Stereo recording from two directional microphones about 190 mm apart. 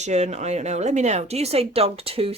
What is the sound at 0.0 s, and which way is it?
Speech, 35° right (ahead or behind).